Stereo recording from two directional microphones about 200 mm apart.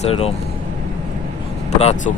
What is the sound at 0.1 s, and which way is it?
Speech, 30° left (ahead or behind).